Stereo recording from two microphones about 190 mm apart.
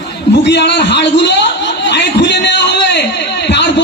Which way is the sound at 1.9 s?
65° left (ahead or behind).